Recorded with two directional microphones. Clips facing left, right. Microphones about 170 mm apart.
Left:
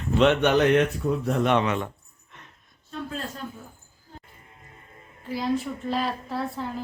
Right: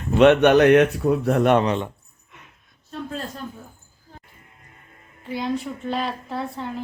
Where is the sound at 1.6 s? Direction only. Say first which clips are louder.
Right 3 dB; 30° right (ahead or behind).